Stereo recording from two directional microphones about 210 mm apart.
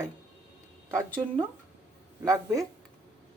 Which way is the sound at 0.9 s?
10° right (ahead or behind).